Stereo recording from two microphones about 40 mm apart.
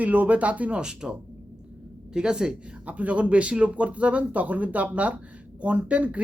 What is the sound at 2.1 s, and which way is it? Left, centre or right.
Speech, centre.